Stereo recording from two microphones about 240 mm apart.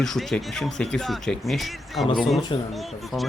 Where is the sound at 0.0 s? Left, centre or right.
Centre.